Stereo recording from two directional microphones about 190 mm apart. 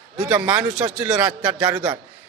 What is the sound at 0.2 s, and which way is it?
Speech, 5° right (ahead or behind).